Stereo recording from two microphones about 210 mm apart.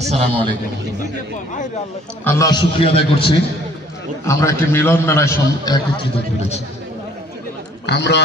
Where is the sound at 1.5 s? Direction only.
35° left (ahead or behind).